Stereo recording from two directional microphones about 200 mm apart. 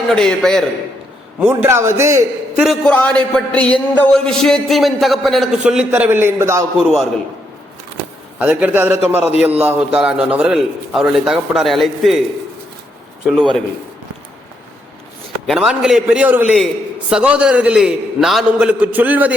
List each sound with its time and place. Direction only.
0.1 s a man's voice: 5° left (ahead or behind)
1.4 s a man's voice: 10° right (ahead or behind)
2.6 s a man's voice: 5° left (ahead or behind)
8.4 s a man's voice: 10° right (ahead or behind)
15.4 s a man's voice: 5° right (ahead or behind)